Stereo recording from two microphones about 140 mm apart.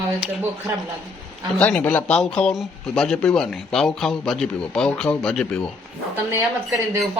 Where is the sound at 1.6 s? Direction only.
10° left (ahead or behind).